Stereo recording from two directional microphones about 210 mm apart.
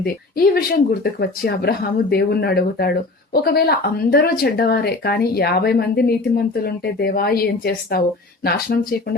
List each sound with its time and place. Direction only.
0.0 s speech: 45° left (ahead or behind)